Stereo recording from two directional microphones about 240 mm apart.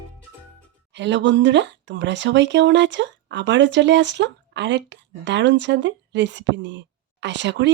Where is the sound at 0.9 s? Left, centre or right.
Right.